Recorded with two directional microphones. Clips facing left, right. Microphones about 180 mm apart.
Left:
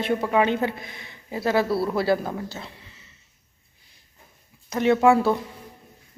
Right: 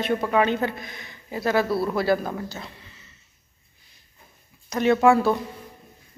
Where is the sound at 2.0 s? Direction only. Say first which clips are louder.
Even; 25° left (ahead or behind).